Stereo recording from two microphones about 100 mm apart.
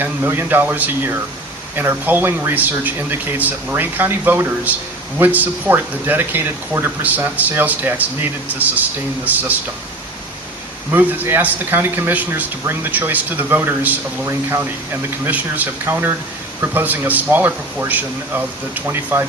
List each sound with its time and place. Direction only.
0.0 s speech: 20° right (ahead or behind)
10.9 s speech: 20° right (ahead or behind)